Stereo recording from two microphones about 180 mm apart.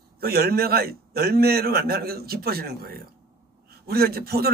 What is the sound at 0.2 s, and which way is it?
A man's voice, 60° right (ahead or behind).